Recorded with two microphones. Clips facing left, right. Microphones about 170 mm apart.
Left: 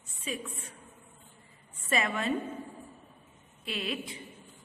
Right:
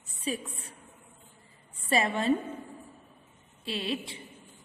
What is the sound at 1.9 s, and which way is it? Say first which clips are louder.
Speech: right 3 dB; 30° right (ahead or behind).